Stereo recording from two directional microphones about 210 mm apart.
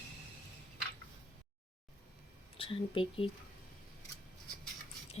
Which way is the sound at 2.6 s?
25° left (ahead or behind).